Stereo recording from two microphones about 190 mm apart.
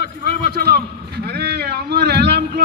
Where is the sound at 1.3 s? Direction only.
60° right (ahead or behind).